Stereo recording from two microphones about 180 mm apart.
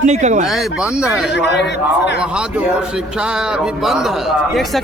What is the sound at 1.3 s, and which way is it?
Speech, 70° left (ahead or behind).